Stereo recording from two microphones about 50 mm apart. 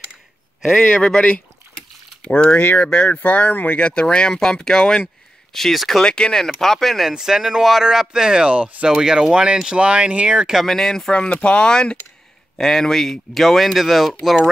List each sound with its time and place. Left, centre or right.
0.7 s speech: centre
6.0 s speech: centre
6.4 s speech: centre
7.1 s speech: centre
10.5 s speech: centre